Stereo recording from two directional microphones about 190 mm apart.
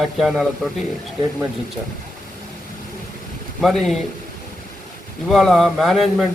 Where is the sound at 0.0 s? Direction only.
Centre (ahead or behind).